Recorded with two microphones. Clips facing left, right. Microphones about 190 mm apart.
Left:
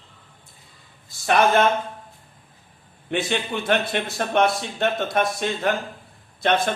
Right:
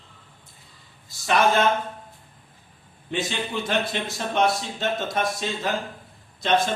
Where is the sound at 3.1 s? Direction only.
60° left (ahead or behind).